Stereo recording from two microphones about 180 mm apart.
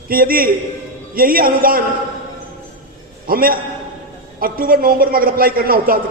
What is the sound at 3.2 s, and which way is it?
A man's voice, 55° right (ahead or behind).